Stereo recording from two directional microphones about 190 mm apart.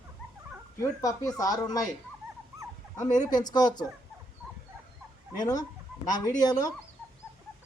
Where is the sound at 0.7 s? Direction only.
15° left (ahead or behind).